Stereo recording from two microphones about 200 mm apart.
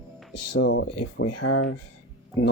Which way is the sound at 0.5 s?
70° left (ahead or behind).